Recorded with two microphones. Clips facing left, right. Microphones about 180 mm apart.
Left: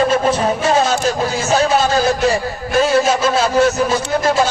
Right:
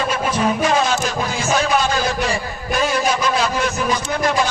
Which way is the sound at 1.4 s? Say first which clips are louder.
Left 3 dB; 35° left (ahead or behind).